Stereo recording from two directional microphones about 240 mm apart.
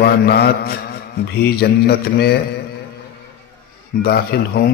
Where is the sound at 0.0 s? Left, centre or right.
Left.